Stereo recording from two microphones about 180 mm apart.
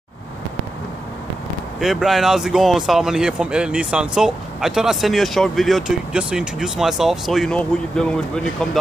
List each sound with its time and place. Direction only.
1.8 s speech: centre (ahead or behind)